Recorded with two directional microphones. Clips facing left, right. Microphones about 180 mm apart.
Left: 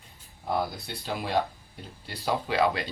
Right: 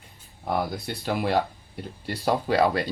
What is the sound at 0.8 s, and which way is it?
Speech, 65° right (ahead or behind).